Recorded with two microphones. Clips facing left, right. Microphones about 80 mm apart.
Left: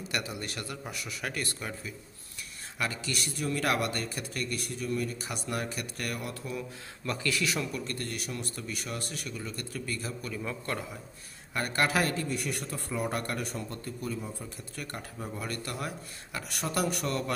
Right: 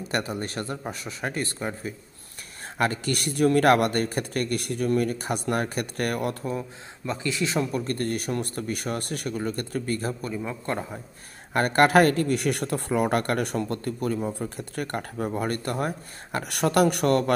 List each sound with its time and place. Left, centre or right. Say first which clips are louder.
0.1 s a man's voice: right 7 dB; right
2.8 s a man's voice: right 8 dB; right
7.1 s a man's voice: right 3 dB; right
10.3 s a man's voice: right 5 dB; right
11.5 s speech: right 10 dB; right